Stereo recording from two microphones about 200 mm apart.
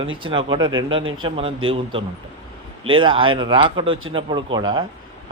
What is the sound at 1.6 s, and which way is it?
A man's voice, 25° right (ahead or behind).